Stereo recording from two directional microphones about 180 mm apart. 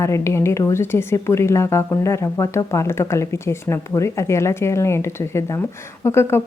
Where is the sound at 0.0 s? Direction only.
15° left (ahead or behind).